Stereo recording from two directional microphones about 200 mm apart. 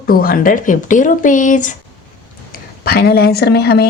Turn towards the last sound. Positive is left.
turn(degrees=55)  # may be behind; listen again after turning